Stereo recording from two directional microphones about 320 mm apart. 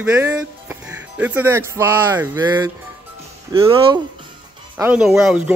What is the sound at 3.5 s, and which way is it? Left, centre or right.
Speech, centre.